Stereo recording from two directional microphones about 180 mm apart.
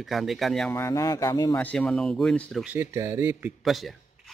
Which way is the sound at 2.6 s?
10° right (ahead or behind).